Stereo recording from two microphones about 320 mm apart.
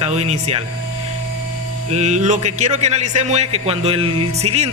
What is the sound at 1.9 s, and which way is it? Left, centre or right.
A man's voice, right.